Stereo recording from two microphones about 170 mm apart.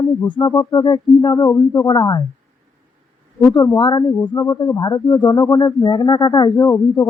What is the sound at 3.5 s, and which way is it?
Speech, 25° left (ahead or behind).